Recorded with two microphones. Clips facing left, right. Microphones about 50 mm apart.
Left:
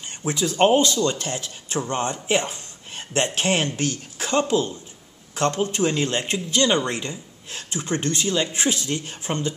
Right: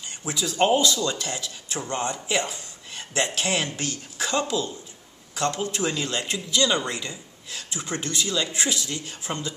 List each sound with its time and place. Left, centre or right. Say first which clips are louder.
0.0 s speech: left 5 dB; left